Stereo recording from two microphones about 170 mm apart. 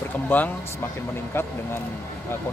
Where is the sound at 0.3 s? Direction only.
10° left (ahead or behind).